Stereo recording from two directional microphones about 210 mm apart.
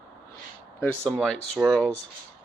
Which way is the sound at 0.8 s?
5° left (ahead or behind).